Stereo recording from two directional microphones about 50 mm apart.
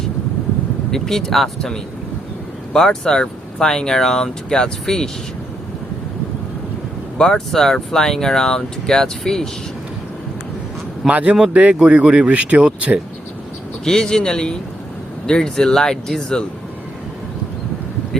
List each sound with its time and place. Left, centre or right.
0.9 s speech: centre
7.2 s speech: centre
11.1 s speech: right
13.8 s speech: centre